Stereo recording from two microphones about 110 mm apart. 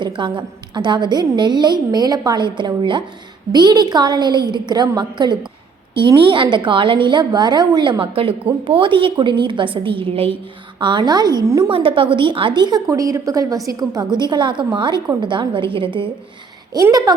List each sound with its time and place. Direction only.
0.0 s a woman's voice: 45° right (ahead or behind)
10.8 s a woman's voice: 45° right (ahead or behind)
11.7 s a woman's voice: 55° right (ahead or behind)
12.9 s a woman's voice: 30° right (ahead or behind); by 16.0 s 50° right (ahead or behind)
16.7 s a woman's voice: 35° right (ahead or behind)